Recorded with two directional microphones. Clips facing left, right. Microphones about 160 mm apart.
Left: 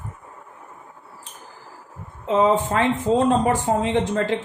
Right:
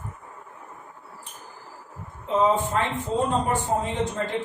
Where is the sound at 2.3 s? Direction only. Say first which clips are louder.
Left 4 dB; 90° left.